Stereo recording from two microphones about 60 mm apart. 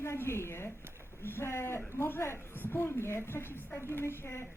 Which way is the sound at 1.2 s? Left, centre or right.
Left.